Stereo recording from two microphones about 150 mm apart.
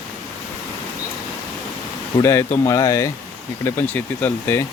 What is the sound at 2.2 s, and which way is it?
Speech, 15° left (ahead or behind).